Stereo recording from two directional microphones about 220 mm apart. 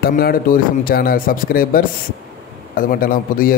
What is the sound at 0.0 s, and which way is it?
A man's voice, 40° left (ahead or behind).